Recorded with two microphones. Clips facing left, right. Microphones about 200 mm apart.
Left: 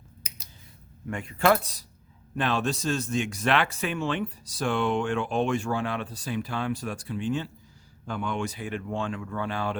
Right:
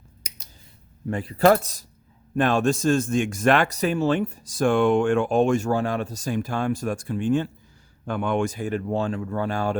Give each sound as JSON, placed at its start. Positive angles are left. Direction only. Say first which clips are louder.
{"t": 1.0, "sound": "speech", "louder": "right 5 dB", "side_deg": -35}